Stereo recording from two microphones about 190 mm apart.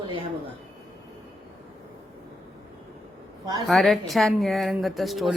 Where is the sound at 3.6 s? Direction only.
Centre (ahead or behind).